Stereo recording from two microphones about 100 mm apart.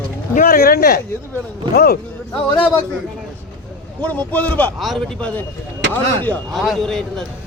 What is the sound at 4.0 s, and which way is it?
Speech, 15° left (ahead or behind).